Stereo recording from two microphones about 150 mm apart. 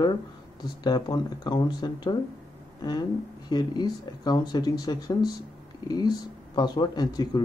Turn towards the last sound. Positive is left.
turn(degrees=25)  # may be behind; listen again after turning